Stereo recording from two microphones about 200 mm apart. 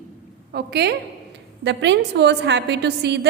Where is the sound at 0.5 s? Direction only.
55° right (ahead or behind).